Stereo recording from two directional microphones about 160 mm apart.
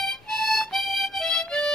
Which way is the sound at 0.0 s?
Centre (ahead or behind).